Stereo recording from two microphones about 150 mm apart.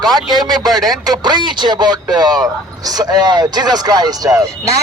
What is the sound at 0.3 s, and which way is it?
Speech, 25° right (ahead or behind).